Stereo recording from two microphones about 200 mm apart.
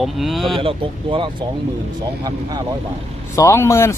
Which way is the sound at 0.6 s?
25° right (ahead or behind).